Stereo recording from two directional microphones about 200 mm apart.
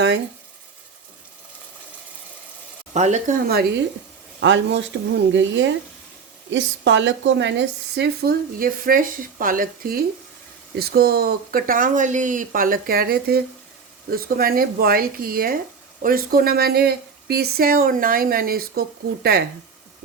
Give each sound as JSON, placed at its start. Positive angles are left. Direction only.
{"t": 2.9, "sound": "speech", "side_deg": -35}
{"t": 4.4, "sound": "speech", "side_deg": -70}